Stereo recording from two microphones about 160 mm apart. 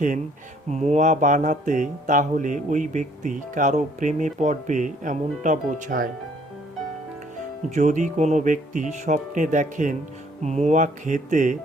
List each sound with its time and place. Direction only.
0.7 s speech: 45° right (ahead or behind)
7.7 s speech: 50° right (ahead or behind)